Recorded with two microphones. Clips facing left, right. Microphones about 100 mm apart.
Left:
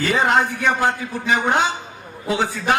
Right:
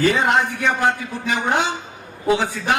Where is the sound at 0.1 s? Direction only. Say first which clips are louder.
Left 1 dB; 35° left (ahead or behind).